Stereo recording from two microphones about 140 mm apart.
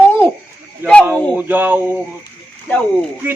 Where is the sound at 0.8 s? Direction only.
15° right (ahead or behind).